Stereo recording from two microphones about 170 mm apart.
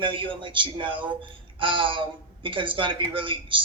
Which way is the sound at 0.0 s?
30° right (ahead or behind).